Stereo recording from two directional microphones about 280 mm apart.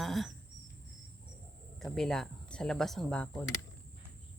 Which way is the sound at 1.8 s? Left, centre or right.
Centre.